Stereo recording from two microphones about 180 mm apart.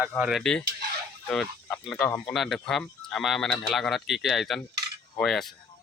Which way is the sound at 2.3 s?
Centre (ahead or behind).